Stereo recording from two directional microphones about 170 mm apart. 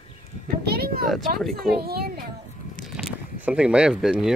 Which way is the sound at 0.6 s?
65° right (ahead or behind).